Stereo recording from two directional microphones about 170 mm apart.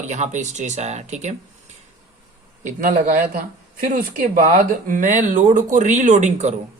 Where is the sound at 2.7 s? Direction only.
50° right (ahead or behind).